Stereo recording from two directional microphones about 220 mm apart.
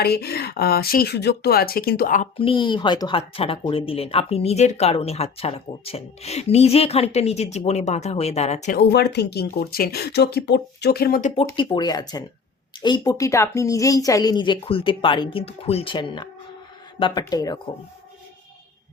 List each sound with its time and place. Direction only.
0.0 s speech: 45° left (ahead or behind)
2.3 s speech: 25° left (ahead or behind)
8.8 s speech: 50° left (ahead or behind)
11.5 s speech: 20° left (ahead or behind)